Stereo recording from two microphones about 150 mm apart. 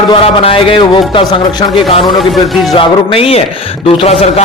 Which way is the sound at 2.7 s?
40° left (ahead or behind).